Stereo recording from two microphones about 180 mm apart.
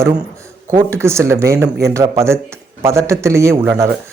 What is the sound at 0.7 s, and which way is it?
Speech, 15° right (ahead or behind).